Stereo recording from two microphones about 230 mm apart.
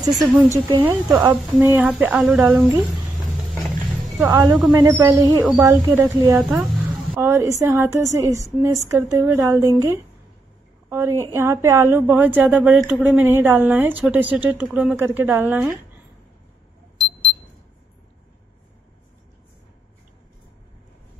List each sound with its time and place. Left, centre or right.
0.1 s speech: centre
0.5 s a woman's voice: centre
4.2 s a woman's voice: centre